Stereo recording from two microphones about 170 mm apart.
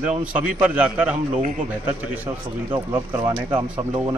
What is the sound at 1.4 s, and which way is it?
Speech, 50° right (ahead or behind).